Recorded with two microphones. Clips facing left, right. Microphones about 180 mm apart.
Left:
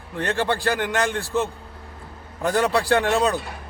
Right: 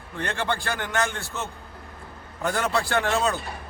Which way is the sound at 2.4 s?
35° left (ahead or behind).